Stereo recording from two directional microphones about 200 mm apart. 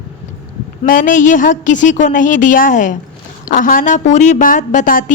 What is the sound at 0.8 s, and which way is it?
A woman's voice, 40° left (ahead or behind).